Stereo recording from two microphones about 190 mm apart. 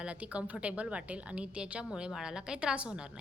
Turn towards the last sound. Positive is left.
turn(degrees=-5)  # may be behind; listen again after turning